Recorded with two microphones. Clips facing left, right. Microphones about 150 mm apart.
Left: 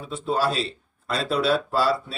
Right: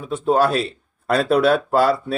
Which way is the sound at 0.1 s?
55° right (ahead or behind).